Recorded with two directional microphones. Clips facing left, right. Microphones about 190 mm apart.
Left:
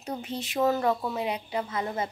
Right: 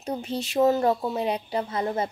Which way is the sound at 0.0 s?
30° right (ahead or behind).